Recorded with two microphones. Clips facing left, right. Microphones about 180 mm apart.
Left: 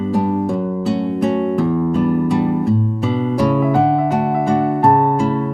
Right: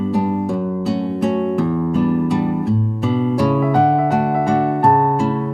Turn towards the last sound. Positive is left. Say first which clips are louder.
# left 1 dB
turn(degrees=0)  # may be behind; listen again after turning